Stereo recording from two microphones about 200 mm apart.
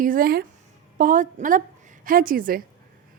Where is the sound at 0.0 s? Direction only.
45° right (ahead or behind).